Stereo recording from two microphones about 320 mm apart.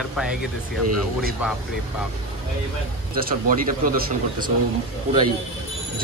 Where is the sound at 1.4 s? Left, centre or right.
Centre.